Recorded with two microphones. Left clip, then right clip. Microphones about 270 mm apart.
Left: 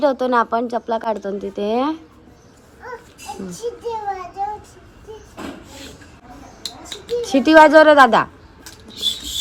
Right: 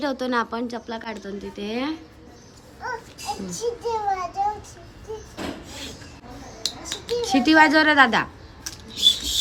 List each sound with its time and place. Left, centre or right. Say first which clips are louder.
0.0 s speech: left 8 dB; centre
3.4 s speech: left 2 dB; centre
6.9 s a sound: left 4 dB; centre